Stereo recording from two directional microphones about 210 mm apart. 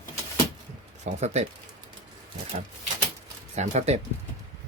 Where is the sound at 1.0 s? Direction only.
30° right (ahead or behind).